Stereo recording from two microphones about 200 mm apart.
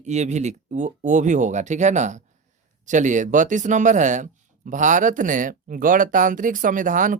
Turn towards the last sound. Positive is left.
turn(degrees=-40)  # may be behind; listen again after turning